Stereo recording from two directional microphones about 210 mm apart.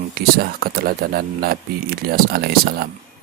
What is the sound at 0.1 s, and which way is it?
Speech, 45° right (ahead or behind).